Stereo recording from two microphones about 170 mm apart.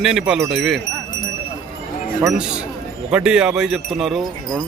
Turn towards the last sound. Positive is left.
turn(degrees=0)  # may be behind; listen again after turning